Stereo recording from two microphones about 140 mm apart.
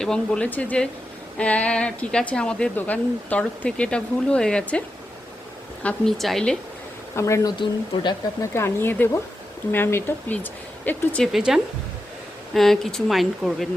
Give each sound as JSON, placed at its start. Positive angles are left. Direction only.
{"t": 0.0, "sound": "speech", "side_deg": 5}
{"t": 5.8, "sound": "speech", "side_deg": 5}
{"t": 7.2, "sound": "speech", "side_deg": 20}
{"t": 7.5, "sound": "speech", "side_deg": 35}
{"t": 8.4, "sound": "speech", "side_deg": 20}
{"t": 11.3, "sound": "speech", "side_deg": -5}